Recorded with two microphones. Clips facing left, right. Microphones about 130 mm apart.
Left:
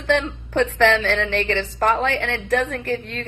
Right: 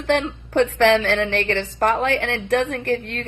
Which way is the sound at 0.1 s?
45° right (ahead or behind).